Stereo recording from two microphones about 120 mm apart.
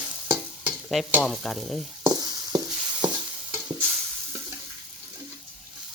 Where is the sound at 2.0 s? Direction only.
35° right (ahead or behind).